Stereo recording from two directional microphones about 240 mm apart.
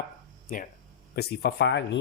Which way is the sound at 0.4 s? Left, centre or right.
Left.